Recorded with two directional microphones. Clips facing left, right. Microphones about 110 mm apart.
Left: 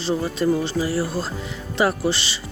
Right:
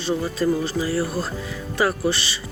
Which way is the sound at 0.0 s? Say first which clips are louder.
Left 1 dB; 25° left (ahead or behind).